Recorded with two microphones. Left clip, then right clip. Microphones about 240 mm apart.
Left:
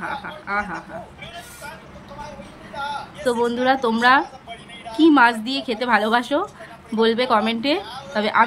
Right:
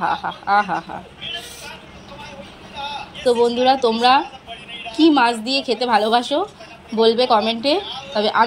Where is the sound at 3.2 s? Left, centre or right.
Left.